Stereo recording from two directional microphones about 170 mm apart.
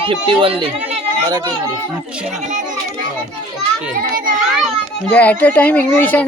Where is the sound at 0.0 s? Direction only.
30° right (ahead or behind).